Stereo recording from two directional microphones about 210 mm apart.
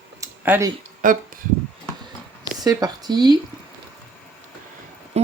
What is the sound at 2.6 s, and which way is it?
Speech, 20° right (ahead or behind).